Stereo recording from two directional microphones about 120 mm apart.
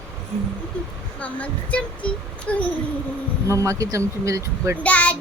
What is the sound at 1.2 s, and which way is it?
Child singing, 10° left (ahead or behind).